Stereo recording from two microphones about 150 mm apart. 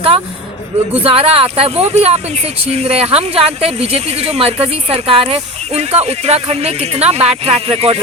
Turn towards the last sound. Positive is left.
turn(degrees=-40)  # may be behind; listen again after turning